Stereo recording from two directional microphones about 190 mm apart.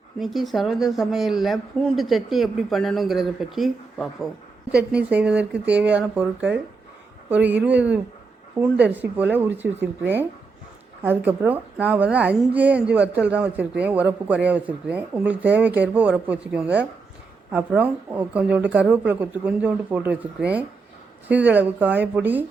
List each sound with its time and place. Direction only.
0.2 s speech: centre (ahead or behind)